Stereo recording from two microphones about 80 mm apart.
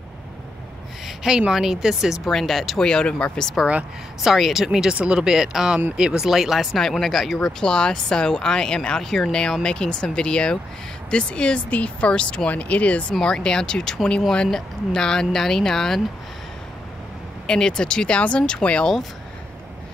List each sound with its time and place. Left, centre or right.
1.0 s a sound: centre
1.5 s speech: centre
4.2 s speech: centre
17.5 s speech: centre